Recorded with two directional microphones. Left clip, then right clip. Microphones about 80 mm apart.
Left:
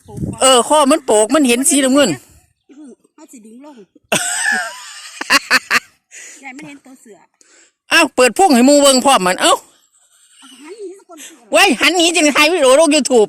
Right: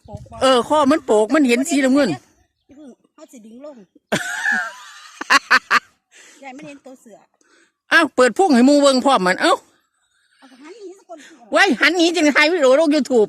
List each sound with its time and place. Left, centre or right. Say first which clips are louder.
0.3 s speech: left 4 dB; centre
2.6 s a sound: left 4 dB; right
3.7 s throat clearing: left 5 dB; centre
6.8 s speech: even; centre
7.5 s a man's voice: left 2 dB; centre